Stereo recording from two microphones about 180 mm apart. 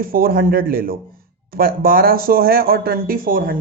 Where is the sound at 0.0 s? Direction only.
55° right (ahead or behind).